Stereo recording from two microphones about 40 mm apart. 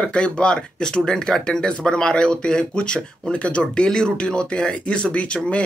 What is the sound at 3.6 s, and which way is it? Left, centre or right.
Speech, centre.